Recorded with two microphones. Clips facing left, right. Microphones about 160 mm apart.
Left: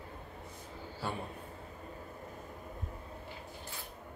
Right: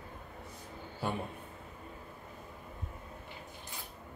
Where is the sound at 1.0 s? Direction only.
20° right (ahead or behind).